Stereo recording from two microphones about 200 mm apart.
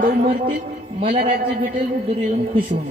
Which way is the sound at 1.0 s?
25° right (ahead or behind).